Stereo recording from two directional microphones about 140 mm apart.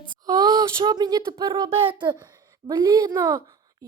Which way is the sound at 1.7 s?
40° right (ahead or behind).